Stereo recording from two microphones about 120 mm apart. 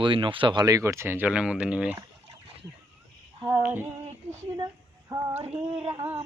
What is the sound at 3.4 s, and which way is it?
Female singing, 20° right (ahead or behind).